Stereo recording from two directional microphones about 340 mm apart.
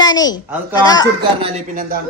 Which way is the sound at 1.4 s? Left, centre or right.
Right.